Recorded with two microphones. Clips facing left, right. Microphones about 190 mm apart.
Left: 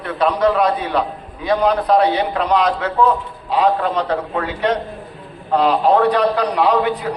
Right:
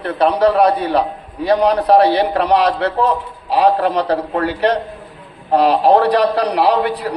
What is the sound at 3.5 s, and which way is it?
A man's voice, 35° right (ahead or behind).